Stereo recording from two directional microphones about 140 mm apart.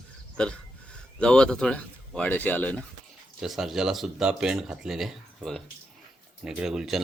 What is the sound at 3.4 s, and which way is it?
Speech, centre (ahead or behind).